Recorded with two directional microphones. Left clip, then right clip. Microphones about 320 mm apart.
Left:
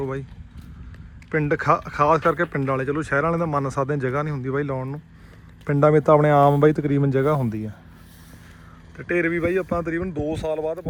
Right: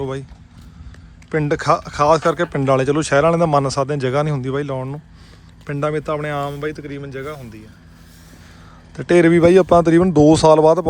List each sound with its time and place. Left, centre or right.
0.0 s speech: centre
1.3 s speech: centre
9.0 s speech: centre
10.1 s speech: right